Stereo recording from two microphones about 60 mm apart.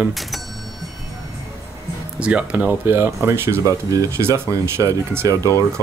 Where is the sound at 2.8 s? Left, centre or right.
Right.